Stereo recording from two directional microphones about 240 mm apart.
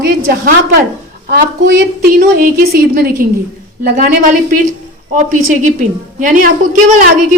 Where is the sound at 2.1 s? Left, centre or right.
Right.